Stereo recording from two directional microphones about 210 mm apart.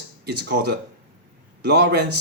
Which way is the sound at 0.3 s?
50° right (ahead or behind).